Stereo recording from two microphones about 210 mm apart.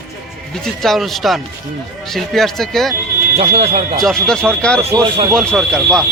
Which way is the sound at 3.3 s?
30° right (ahead or behind).